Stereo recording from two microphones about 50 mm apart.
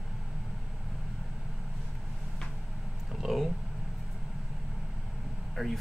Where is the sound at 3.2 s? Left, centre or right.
Centre.